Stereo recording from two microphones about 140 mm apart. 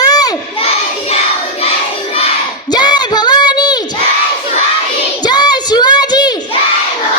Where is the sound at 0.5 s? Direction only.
45° left (ahead or behind).